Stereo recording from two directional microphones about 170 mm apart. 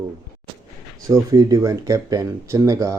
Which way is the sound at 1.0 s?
20° right (ahead or behind).